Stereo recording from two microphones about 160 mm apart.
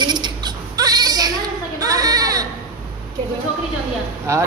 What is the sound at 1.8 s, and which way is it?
Baby cry, 20° right (ahead or behind).